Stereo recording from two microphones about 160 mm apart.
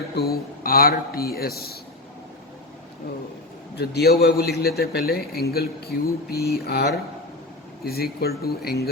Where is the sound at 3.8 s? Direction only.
80° left.